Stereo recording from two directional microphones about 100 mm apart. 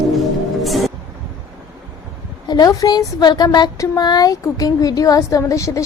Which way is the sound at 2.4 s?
40° left (ahead or behind).